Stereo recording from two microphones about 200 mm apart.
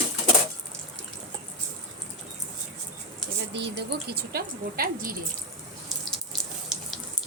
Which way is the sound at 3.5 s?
60° right (ahead or behind).